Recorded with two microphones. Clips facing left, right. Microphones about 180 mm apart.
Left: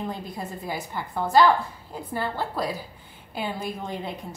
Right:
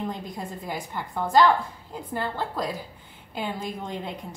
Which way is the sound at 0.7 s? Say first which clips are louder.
Left 1 dB; 5° left (ahead or behind).